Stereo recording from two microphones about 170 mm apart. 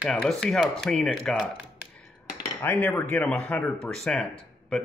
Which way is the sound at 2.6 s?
10° left (ahead or behind).